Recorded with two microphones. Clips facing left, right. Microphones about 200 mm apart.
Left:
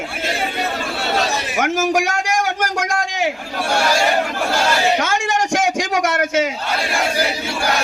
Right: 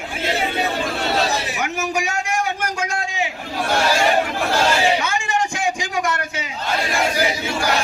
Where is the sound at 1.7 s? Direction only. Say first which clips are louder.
Left 5 dB; 90° left.